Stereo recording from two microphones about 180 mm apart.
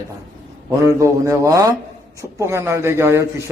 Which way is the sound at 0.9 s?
15° right (ahead or behind).